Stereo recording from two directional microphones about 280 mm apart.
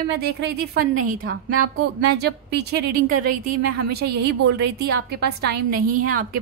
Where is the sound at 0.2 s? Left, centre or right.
Right.